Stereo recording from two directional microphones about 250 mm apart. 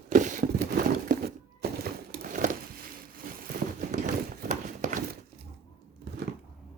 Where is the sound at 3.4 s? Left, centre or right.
Right.